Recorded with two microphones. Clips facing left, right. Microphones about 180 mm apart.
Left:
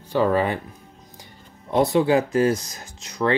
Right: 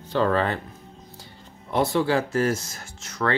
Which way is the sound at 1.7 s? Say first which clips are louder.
Left 4 dB; 20° left (ahead or behind).